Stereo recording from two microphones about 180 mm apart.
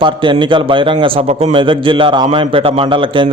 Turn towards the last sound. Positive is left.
turn(degrees=-30)  # may be behind; listen again after turning